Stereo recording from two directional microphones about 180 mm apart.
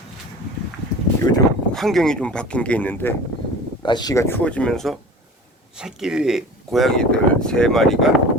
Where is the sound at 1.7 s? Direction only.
Centre (ahead or behind).